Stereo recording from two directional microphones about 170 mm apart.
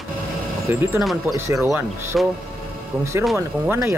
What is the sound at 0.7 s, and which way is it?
Speech, 10° right (ahead or behind).